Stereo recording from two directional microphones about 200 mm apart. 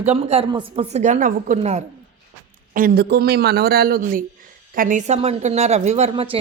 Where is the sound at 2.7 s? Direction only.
45° right (ahead or behind).